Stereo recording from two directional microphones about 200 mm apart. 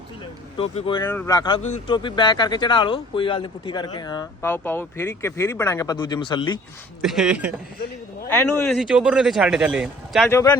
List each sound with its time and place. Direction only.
0.5 s speech: 30° left (ahead or behind)
1.0 s speech: 10° left (ahead or behind)
1.4 s speech: 25° left (ahead or behind)
7.0 s speech: centre (ahead or behind)
8.3 s speech: 5° left (ahead or behind)
10.2 s speech: 15° left (ahead or behind)